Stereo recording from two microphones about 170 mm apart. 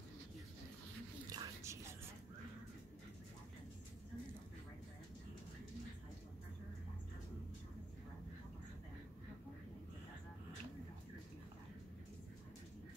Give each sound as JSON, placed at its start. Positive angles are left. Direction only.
{"t": 1.3, "sound": "whispering", "side_deg": -20}